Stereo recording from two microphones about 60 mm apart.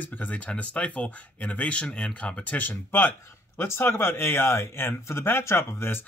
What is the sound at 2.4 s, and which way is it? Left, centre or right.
Speech, left.